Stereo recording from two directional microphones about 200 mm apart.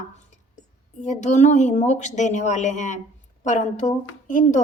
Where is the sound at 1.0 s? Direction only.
35° left (ahead or behind).